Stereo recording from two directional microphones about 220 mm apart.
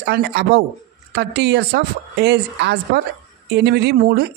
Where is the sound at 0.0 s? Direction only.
50° right (ahead or behind).